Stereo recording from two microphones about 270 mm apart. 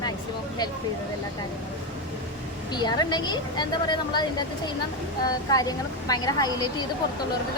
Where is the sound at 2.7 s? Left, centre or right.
Centre.